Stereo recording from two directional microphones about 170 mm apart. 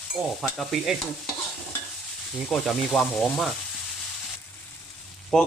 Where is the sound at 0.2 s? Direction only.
10° right (ahead or behind).